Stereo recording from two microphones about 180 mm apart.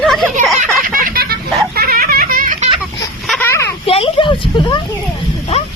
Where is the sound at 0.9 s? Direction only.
50° right (ahead or behind).